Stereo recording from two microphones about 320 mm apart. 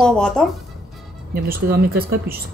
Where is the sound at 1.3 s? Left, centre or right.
Right.